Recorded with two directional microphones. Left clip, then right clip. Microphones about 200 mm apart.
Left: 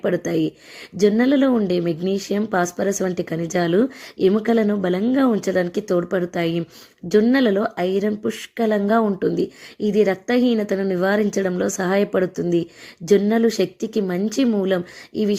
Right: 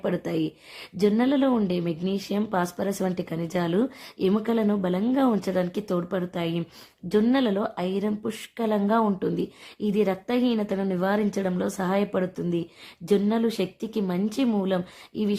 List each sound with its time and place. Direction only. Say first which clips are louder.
0.0 s speech: left 6 dB; 10° left (ahead or behind)